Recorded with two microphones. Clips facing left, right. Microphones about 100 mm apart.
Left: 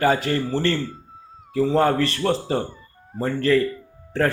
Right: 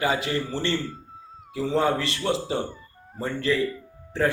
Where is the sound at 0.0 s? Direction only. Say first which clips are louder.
Left 5 dB; 45° left (ahead or behind).